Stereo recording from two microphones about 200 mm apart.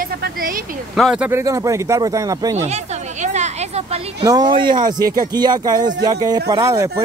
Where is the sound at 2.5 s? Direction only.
35° right (ahead or behind).